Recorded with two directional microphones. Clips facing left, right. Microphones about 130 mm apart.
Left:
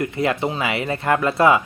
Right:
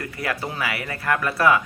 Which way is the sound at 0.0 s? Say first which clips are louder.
Left 7 dB; 25° left (ahead or behind).